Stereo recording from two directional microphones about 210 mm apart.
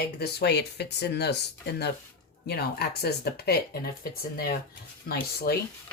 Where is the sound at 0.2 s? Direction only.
50° left (ahead or behind).